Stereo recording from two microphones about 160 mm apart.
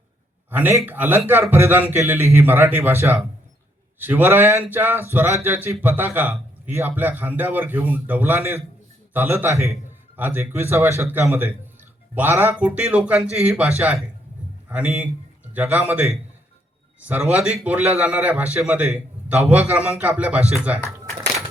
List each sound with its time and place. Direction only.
0.5 s a man's voice: 15° right (ahead or behind)